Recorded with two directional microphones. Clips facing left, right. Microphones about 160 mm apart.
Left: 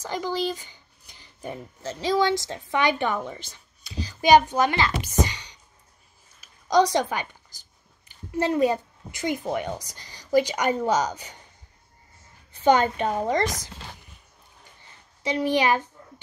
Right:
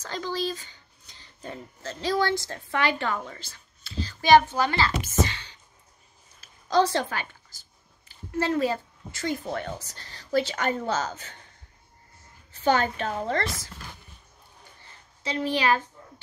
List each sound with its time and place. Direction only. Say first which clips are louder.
0.0 s a woman's voice: left 3 dB; 15° left (ahead or behind)
12.6 s speech: left 4 dB; 15° left (ahead or behind)
15.2 s speech: left 3 dB; 15° left (ahead or behind)